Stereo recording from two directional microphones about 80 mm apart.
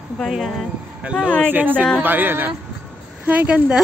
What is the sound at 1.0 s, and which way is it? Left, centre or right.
Speech, centre.